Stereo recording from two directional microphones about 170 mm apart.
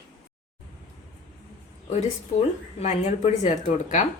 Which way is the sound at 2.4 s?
40° left (ahead or behind).